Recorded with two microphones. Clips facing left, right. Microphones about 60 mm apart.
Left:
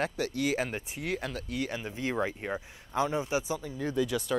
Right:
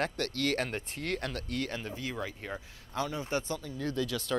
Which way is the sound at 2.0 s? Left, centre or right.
Left.